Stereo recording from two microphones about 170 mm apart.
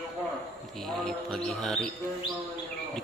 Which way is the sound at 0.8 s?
Centre (ahead or behind).